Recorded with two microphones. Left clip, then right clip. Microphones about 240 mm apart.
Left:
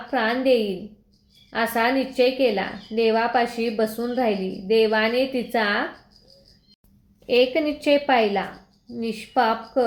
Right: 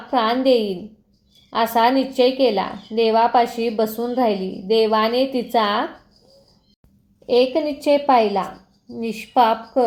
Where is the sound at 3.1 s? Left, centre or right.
Centre.